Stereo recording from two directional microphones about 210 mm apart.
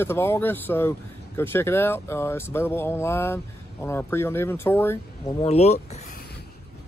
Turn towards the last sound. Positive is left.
turn(degrees=30)  # may be behind; listen again after turning